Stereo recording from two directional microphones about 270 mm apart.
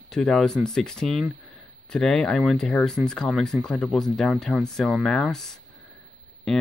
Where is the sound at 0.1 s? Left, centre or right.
Centre.